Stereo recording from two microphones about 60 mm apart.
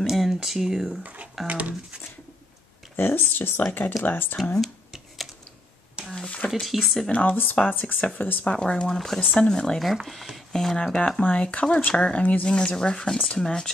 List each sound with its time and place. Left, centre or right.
0.0 s speech: centre
1.0 s speech: right
3.0 s speech: left
4.6 s a sound: centre
6.1 s a sound: centre
6.5 s speech: centre
7.1 s speech: left
8.5 s speech: centre
10.0 s speech: centre
11.0 s speech: centre